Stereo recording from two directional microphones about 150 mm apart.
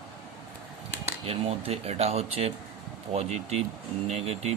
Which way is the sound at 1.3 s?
40° right (ahead or behind).